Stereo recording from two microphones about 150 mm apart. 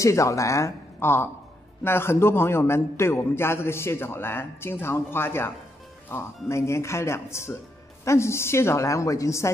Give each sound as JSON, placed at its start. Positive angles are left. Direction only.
{"t": 0.0, "sound": "a woman's voice", "side_deg": 20}